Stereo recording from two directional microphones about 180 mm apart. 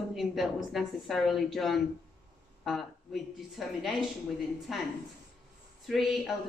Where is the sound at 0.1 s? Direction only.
Centre (ahead or behind).